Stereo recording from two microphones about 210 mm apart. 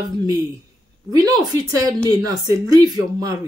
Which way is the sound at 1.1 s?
15° right (ahead or behind).